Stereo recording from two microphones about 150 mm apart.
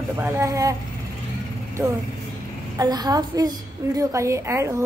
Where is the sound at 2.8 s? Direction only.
25° right (ahead or behind).